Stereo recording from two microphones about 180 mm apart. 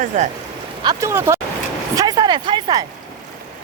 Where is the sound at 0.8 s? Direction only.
15° right (ahead or behind).